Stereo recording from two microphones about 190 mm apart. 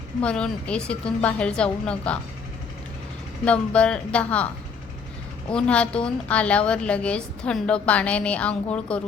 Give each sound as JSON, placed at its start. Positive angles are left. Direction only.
{"t": 0.2, "sound": "a woman's voice", "side_deg": 5}
{"t": 3.4, "sound": "a woman's voice", "side_deg": 5}
{"t": 5.5, "sound": "a woman's voice", "side_deg": 5}